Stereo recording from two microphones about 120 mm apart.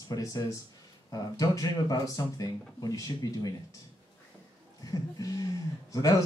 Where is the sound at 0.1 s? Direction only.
30° left (ahead or behind).